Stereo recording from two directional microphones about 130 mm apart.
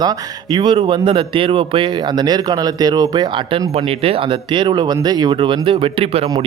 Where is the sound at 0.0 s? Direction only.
35° right (ahead or behind); by 6.3 s 50° right (ahead or behind).